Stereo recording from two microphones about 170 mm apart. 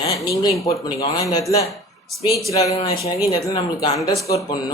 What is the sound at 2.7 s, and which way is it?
Speech, 35° left (ahead or behind).